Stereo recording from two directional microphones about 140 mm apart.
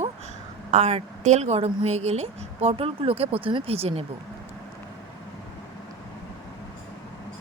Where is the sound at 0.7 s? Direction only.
50° right (ahead or behind).